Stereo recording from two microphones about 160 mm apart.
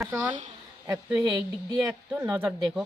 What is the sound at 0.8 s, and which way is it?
A woman's voice, 10° right (ahead or behind).